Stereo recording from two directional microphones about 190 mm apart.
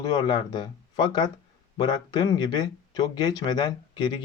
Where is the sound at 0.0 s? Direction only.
20° left (ahead or behind).